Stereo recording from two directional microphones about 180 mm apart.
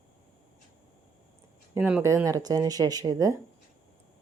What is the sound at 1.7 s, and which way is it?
Speech, 10° right (ahead or behind).